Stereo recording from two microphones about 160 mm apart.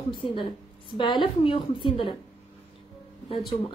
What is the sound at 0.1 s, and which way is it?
A woman's voice, 30° left (ahead or behind).